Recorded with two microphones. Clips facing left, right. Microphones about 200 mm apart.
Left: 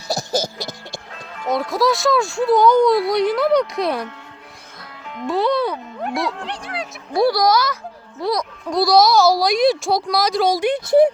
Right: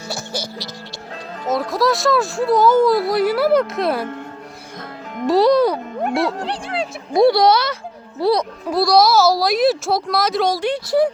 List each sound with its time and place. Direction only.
0.1 s music: 40° left (ahead or behind)
1.5 s speech: centre (ahead or behind)
5.1 s speech: 40° right (ahead or behind)
8.7 s speech: centre (ahead or behind)
10.5 s speech: 20° left (ahead or behind)